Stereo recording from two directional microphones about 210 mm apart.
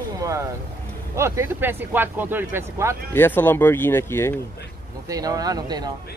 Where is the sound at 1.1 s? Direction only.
15° right (ahead or behind).